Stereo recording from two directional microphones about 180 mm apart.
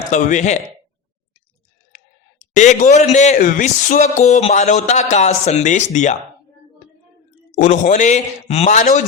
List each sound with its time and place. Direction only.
0.1 s speech: 45° left (ahead or behind)
2.5 s speech: 45° left (ahead or behind)
7.5 s speech: 45° left (ahead or behind)